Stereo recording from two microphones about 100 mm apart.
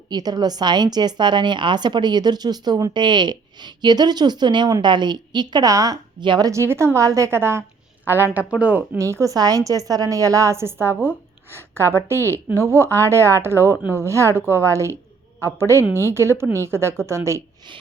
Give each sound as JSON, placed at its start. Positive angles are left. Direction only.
{"t": 0.1, "sound": "a woman's voice", "side_deg": -45}
{"t": 6.5, "sound": "a woman's voice", "side_deg": -30}
{"t": 9.0, "sound": "a woman's voice", "side_deg": -30}